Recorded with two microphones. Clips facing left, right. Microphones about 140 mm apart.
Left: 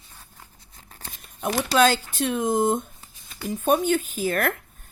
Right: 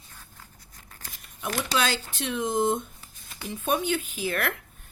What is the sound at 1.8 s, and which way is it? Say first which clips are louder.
Speech: left 10 dB; 45° left (ahead or behind).